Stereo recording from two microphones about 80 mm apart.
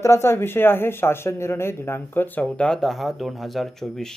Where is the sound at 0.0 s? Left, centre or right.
Left.